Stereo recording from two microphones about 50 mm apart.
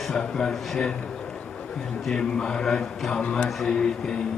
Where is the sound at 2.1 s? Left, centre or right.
Centre.